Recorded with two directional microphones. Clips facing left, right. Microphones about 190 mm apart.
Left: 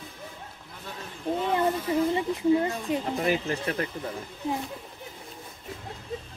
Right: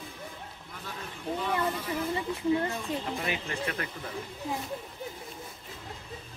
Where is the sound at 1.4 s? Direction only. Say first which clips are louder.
Left 5 dB; 25° left (ahead or behind).